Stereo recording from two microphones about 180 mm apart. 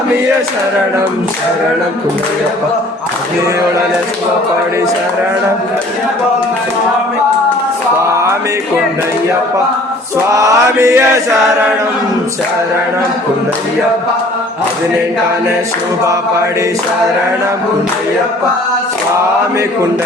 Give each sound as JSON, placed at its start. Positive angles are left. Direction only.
{"t": 8.0, "sound": "music", "side_deg": -15}
{"t": 10.3, "sound": "mantra", "side_deg": -15}